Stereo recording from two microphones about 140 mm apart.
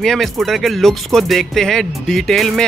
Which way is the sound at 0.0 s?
Centre (ahead or behind).